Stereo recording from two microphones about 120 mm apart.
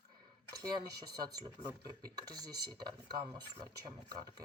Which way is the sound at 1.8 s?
35° right (ahead or behind).